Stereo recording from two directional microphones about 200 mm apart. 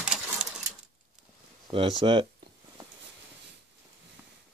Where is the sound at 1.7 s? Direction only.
25° right (ahead or behind).